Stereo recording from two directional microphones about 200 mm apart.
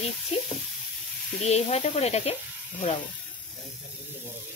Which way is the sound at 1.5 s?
35° left (ahead or behind).